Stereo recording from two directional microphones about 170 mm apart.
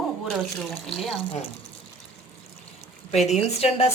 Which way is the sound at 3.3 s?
40° left (ahead or behind).